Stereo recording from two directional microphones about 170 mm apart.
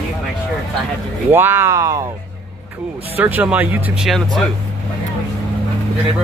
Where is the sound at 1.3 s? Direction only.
15° right (ahead or behind).